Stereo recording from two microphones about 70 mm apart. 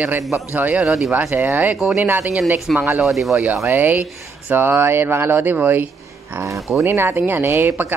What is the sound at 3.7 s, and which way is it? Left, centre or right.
Speech, right.